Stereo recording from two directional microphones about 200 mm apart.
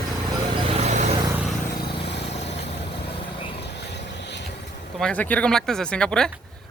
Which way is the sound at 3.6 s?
60° left (ahead or behind).